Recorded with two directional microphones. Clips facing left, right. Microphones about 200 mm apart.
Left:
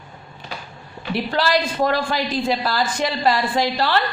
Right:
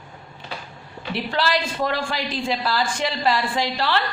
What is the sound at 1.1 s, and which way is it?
A woman's voice, 40° left (ahead or behind).